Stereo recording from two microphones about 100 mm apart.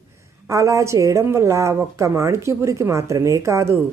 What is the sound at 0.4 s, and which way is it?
Speech, 30° right (ahead or behind).